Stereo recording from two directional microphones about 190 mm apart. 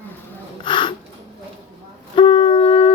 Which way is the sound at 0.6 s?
25° left (ahead or behind).